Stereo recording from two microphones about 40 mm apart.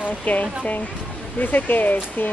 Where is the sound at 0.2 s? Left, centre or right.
Left.